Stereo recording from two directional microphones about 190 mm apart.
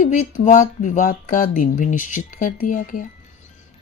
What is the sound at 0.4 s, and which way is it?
Speech, 40° left (ahead or behind).